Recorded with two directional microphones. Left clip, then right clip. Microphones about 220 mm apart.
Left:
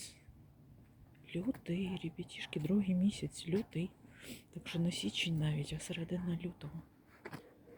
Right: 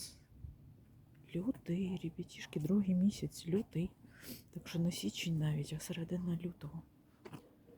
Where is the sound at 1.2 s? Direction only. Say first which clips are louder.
Even; 10° right (ahead or behind).